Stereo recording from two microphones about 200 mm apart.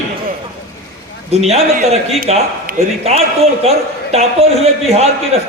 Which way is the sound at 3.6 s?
30° right (ahead or behind).